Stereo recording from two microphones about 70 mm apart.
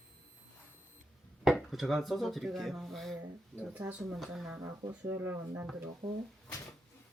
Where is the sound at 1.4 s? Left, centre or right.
Centre.